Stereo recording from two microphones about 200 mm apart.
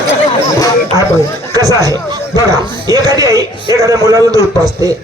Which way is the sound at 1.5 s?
15° right (ahead or behind).